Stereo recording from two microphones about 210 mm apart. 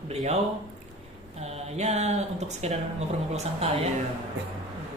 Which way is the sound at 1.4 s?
30° right (ahead or behind).